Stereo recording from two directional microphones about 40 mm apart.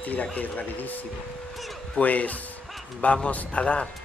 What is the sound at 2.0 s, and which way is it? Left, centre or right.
Speech, left.